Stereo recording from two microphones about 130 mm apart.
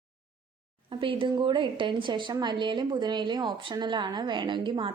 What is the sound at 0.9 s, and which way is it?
A woman's voice, 40° right (ahead or behind).